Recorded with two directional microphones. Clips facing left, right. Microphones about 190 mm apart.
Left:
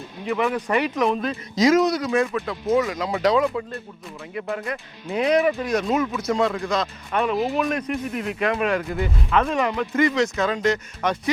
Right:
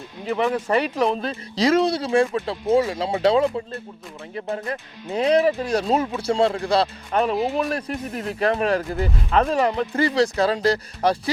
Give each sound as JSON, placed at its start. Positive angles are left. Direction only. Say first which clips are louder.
{"t": 0.3, "sound": "speech", "louder": "right 1 dB", "side_deg": -35}